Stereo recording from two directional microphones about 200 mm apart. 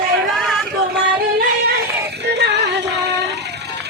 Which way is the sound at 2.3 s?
60° right (ahead or behind).